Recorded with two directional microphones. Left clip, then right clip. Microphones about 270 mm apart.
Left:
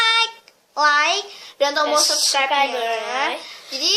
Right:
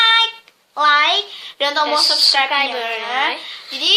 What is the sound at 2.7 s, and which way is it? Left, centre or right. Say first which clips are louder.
Speech: even; centre.